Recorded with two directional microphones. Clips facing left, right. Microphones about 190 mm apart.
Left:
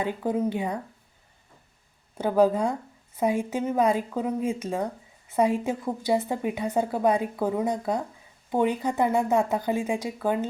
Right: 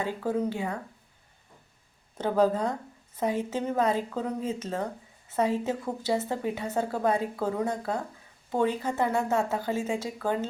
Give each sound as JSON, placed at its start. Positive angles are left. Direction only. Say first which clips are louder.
{"t": 0.0, "sound": "speech", "louder": "left 2 dB", "side_deg": 15}
{"t": 2.1, "sound": "speech", "louder": "left 3 dB", "side_deg": 10}